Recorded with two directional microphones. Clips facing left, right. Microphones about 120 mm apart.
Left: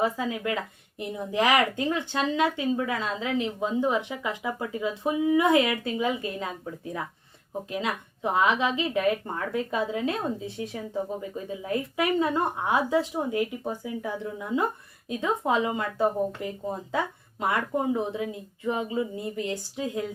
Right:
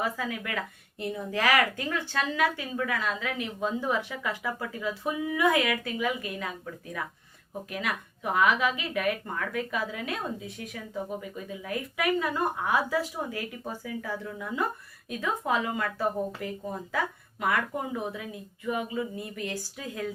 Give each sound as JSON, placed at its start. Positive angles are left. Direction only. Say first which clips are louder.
{"t": 0.0, "sound": "speech", "louder": "left 5 dB", "side_deg": 25}
{"t": 7.7, "sound": "speech", "louder": "left 2 dB", "side_deg": 25}